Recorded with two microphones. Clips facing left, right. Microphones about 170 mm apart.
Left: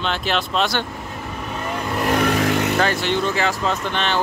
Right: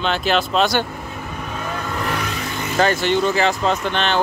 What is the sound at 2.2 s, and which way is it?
Vehicle, 70° left (ahead or behind).